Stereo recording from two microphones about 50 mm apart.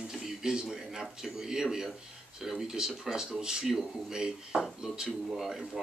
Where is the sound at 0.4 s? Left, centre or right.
Centre.